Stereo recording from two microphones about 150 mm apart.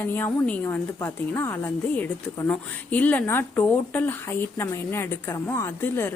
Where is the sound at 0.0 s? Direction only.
15° left (ahead or behind).